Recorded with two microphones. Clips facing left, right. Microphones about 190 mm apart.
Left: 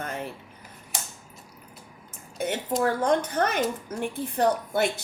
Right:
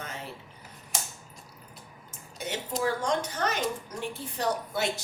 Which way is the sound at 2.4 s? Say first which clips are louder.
Left 5 dB; 55° left (ahead or behind).